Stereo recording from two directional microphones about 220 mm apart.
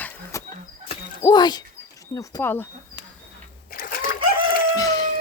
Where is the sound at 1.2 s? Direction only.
20° left (ahead or behind).